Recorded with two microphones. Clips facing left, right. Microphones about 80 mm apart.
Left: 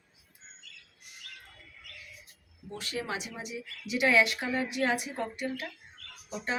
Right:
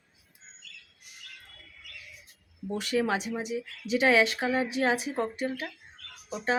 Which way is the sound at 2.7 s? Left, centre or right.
Right.